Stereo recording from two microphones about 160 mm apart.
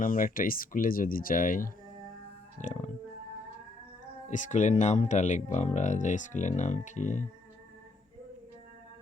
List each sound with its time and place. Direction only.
0.0 s speech: 60° left (ahead or behind)
4.3 s speech: 50° left (ahead or behind)